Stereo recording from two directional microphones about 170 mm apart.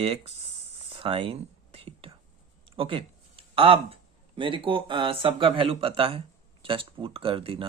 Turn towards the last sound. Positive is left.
turn(degrees=-30)  # may be behind; listen again after turning